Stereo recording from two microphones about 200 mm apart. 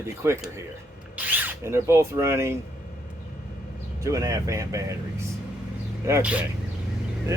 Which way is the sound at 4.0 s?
15° right (ahead or behind).